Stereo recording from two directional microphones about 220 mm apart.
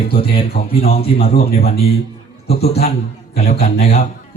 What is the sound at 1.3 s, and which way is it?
Speech, 40° left (ahead or behind).